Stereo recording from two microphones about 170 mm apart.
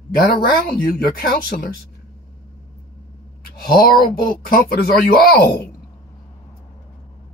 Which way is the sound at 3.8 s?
60° left (ahead or behind).